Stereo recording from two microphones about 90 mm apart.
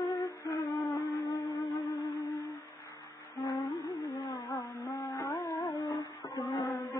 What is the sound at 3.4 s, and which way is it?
Humming, 45° left (ahead or behind).